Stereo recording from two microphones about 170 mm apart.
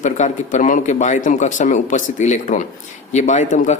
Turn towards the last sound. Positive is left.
turn(degrees=45)  # may be behind; listen again after turning